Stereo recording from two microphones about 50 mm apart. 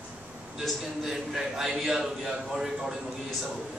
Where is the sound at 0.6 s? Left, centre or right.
Centre.